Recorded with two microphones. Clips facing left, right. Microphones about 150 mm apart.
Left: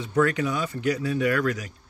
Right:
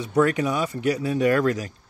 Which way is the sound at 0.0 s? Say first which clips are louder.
Right 2 dB; 20° right (ahead or behind).